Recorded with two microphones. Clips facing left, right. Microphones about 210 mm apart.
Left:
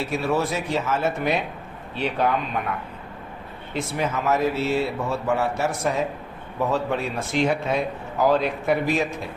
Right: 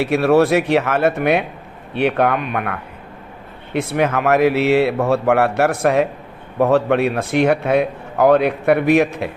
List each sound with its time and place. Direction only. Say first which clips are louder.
0.0 s a man's voice: right 10 dB; 70° right (ahead or behind)